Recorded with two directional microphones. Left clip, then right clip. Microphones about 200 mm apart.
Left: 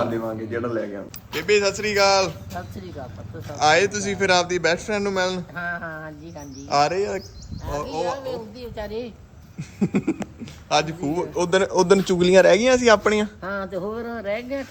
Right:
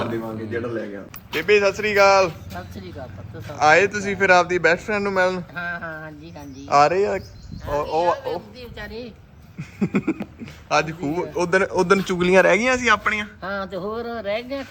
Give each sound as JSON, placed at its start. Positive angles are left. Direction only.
{"t": 0.0, "sound": "a man's voice", "side_deg": 10}
{"t": 1.4, "sound": "speech", "side_deg": 0}
{"t": 7.9, "sound": "a man's voice", "side_deg": 30}
{"t": 8.7, "sound": "a woman's voice", "side_deg": 45}
{"t": 9.6, "sound": "speech", "side_deg": 0}
{"t": 12.6, "sound": "a man's voice", "side_deg": 15}
{"t": 13.4, "sound": "speech", "side_deg": 0}